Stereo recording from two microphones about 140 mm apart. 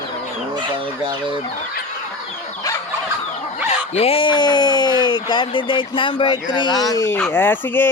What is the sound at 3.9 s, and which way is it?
Speech, 45° left (ahead or behind).